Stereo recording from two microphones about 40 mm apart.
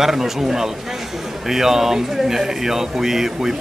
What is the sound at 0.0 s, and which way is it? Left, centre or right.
Speech, centre.